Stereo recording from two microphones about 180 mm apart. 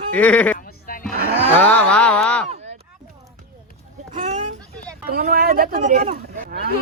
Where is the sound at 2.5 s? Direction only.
35° right (ahead or behind).